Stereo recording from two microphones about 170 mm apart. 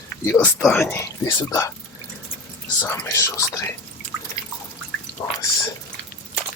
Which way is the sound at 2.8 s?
15° left (ahead or behind).